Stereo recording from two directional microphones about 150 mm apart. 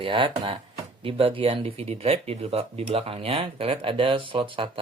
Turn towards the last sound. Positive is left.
turn(degrees=-35)  # may be behind; listen again after turning